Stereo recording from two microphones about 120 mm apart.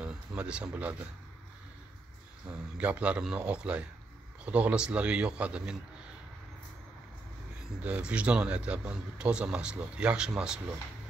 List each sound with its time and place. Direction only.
0.0 s speech: 10° right (ahead or behind)
2.8 s a man's voice: 10° right (ahead or behind)
7.8 s a man's voice: 10° right (ahead or behind)